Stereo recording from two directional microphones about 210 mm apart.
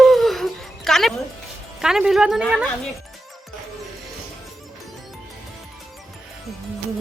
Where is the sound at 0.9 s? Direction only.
Centre (ahead or behind).